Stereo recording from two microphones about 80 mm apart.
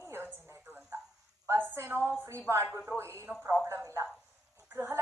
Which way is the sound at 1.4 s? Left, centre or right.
Right.